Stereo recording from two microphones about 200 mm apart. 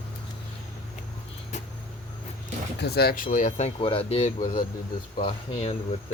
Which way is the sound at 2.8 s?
55° left (ahead or behind).